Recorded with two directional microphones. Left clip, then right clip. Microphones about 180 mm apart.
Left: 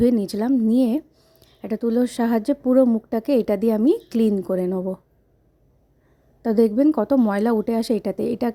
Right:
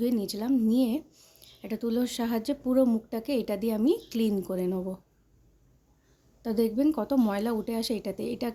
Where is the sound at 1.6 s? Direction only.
35° left (ahead or behind).